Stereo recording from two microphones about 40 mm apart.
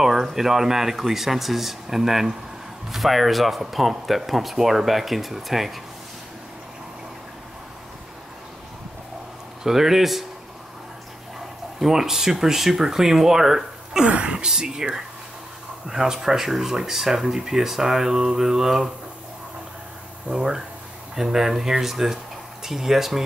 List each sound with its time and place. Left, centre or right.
0.0 s speech: centre
9.6 s speech: centre
11.8 s speech: centre
14.0 s speech: right; by 18.9 s centre
20.2 s speech: right
21.1 s speech: centre